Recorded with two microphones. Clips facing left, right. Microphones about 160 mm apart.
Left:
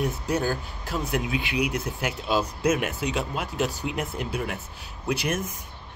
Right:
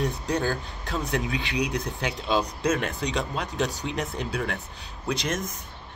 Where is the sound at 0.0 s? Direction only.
5° left (ahead or behind).